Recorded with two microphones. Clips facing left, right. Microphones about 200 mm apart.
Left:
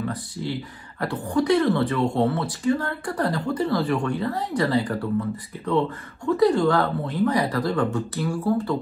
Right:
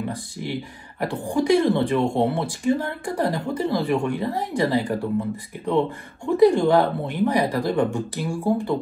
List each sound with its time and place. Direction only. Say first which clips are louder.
0.0 s speech: even; 15° right (ahead or behind)